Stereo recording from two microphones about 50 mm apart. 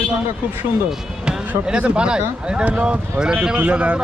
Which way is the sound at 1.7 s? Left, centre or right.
Right.